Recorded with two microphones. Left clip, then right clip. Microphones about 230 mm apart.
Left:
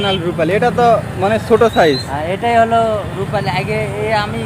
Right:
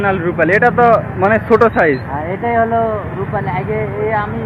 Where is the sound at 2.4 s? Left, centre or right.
Left.